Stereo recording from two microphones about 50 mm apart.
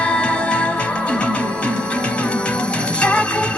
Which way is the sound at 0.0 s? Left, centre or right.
Left.